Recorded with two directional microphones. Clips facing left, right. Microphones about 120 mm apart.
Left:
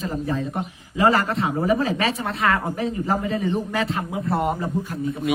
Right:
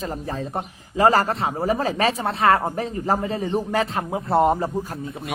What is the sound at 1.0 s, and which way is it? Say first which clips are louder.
Speech: right 1 dB; 40° right (ahead or behind).